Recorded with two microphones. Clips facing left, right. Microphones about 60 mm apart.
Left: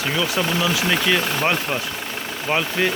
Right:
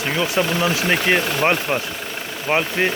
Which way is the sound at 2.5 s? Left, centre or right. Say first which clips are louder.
Right 2 dB; right.